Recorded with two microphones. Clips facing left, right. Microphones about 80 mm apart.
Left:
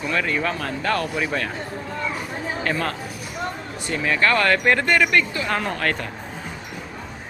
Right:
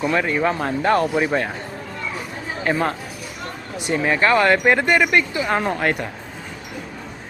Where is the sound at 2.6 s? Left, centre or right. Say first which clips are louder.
Right 6 dB; centre.